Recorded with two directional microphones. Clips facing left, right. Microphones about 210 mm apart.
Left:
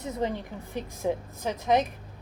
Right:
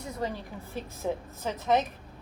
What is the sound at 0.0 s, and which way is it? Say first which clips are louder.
A woman's voice: left 4 dB; 20° left (ahead or behind).